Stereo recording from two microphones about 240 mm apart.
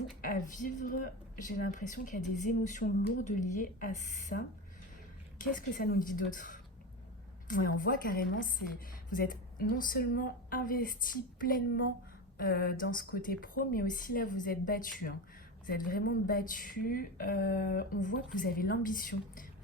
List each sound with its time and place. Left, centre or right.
0.2 s speech: left